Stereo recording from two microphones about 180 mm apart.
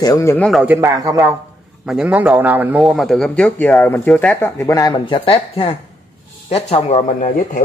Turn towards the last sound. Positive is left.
turn(degrees=40)  # may be behind; listen again after turning